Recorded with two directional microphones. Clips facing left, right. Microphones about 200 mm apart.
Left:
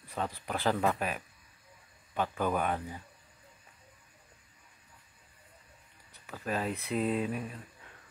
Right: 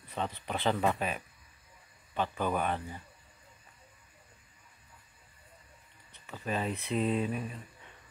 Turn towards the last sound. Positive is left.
turn(degrees=0)  # may be behind; listen again after turning